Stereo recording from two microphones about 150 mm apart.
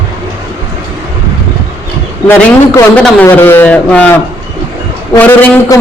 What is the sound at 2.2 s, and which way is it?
A man's voice, 15° left (ahead or behind).